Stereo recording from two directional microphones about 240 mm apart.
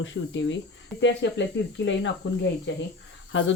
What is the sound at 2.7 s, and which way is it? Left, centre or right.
Speech, left.